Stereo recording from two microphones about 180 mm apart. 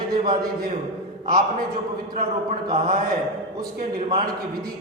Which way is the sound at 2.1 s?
45° right (ahead or behind).